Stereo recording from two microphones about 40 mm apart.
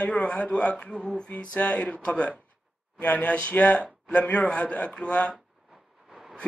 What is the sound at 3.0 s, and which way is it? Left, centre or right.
A man's voice, left.